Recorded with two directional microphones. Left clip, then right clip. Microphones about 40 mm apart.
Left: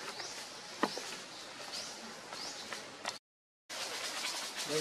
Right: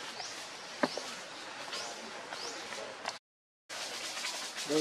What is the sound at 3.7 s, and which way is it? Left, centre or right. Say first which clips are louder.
Bird: even; centre.